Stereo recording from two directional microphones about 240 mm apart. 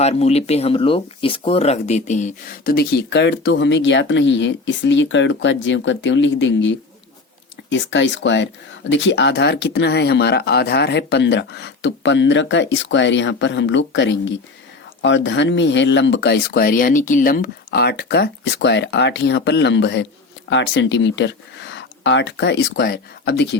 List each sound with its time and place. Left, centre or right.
0.0 s speech: left